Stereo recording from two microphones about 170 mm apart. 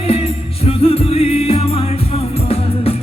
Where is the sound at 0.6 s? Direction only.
35° left (ahead or behind).